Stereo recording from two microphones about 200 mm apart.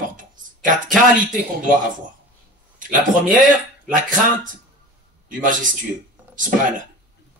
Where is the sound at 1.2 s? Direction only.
40° right (ahead or behind).